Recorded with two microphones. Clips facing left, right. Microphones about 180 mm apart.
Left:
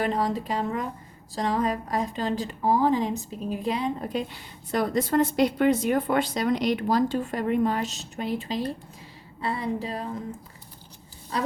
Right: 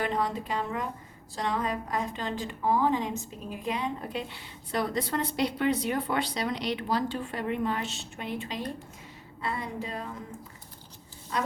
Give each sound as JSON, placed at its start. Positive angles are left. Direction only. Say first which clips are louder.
{"t": 0.0, "sound": "a woman's voice", "louder": "left 4 dB", "side_deg": 40}
{"t": 11.3, "sound": "speech", "louder": "left 3 dB", "side_deg": 35}